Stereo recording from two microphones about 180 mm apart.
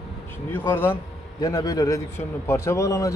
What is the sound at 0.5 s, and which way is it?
A man's voice, 15° left (ahead or behind).